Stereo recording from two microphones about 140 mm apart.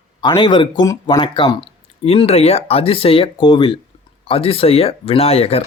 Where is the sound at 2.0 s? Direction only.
45° left (ahead or behind).